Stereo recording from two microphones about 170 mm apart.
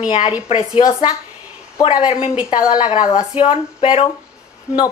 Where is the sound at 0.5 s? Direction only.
35° left (ahead or behind).